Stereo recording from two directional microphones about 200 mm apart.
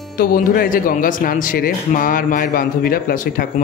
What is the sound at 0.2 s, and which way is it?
Speech, 45° left (ahead or behind).